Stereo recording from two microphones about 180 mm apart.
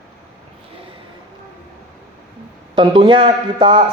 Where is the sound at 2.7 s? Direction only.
25° right (ahead or behind).